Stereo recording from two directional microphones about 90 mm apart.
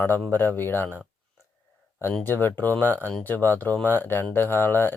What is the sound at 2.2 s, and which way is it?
Speech, 20° left (ahead or behind).